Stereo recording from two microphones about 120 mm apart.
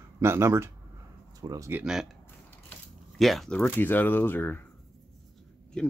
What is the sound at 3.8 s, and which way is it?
Speech, 15° left (ahead or behind).